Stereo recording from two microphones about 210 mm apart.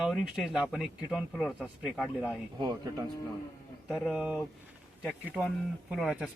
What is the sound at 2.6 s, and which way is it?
Speech, 20° right (ahead or behind).